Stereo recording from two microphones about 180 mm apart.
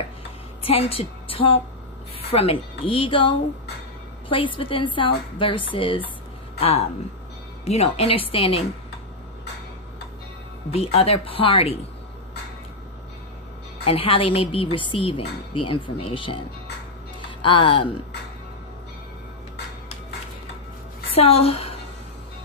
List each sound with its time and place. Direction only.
0.7 s a woman's voice: 35° left (ahead or behind)
10.7 s speech: 35° left (ahead or behind)
13.8 s a woman's voice: 30° left (ahead or behind)
21.2 s speech: 35° left (ahead or behind)